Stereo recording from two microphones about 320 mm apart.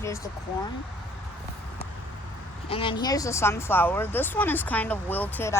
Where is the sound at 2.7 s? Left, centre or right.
Centre.